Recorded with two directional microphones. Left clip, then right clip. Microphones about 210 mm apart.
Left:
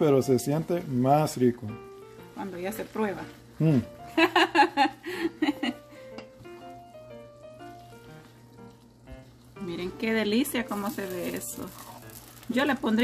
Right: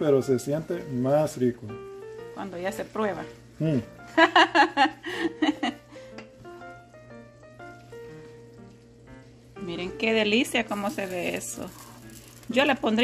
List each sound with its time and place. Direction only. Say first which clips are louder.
0.0 s speech: even; 45° left (ahead or behind)
2.3 s speech: right 2 dB; centre (ahead or behind)
4.1 s chuckle: right 4 dB; 5° right (ahead or behind)
9.7 s speech: right 4 dB; centre (ahead or behind)
12.4 s speech: right 4 dB; centre (ahead or behind)